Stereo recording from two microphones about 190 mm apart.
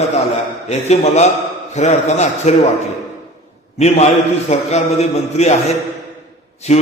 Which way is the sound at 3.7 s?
35° left (ahead or behind).